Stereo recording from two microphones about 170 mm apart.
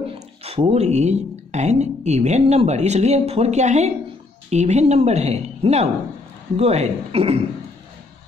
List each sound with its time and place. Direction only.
0.4 s speech: 35° right (ahead or behind)